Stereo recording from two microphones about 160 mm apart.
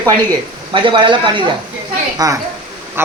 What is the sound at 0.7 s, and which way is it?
Speech, 30° right (ahead or behind).